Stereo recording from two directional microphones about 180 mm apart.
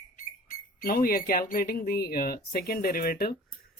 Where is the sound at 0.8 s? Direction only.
55° left (ahead or behind).